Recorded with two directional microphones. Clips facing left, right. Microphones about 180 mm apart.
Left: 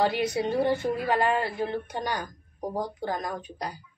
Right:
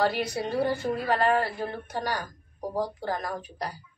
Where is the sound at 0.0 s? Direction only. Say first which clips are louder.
Left 2 dB; 20° left (ahead or behind).